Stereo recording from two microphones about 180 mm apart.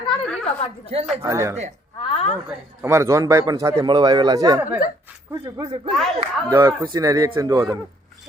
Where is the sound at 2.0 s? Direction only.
30° left (ahead or behind).